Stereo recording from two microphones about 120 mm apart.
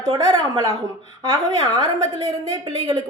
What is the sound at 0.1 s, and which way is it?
A woman's voice, 30° right (ahead or behind).